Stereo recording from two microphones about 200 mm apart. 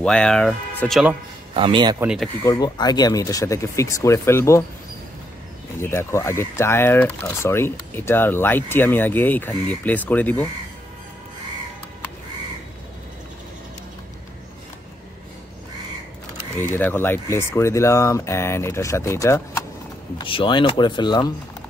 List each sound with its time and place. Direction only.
0.0 s speech: 5° left (ahead or behind)
1.5 s speech: 25° right (ahead or behind)
2.0 s speech: 5° right (ahead or behind)
2.4 s speech: 20° left (ahead or behind)
5.8 s speech: 10° left (ahead or behind)
16.5 s speech: 10° left (ahead or behind)
20.2 s speech: 25° left (ahead or behind)